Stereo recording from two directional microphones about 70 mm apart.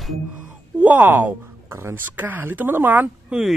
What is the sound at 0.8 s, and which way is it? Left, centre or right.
Speech, right.